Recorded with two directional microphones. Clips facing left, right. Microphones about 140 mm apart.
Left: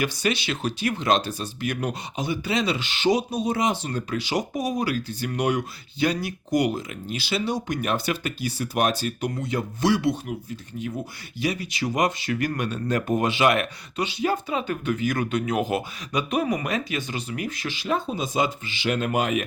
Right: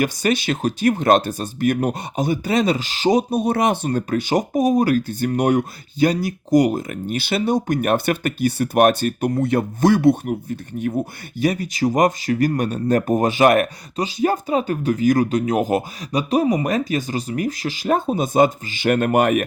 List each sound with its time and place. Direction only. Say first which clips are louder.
0.0 s speech: right 5 dB; 45° right (ahead or behind); by 3.8 s 60° right (ahead or behind)
3.8 s speech: right 7 dB; 45° right (ahead or behind)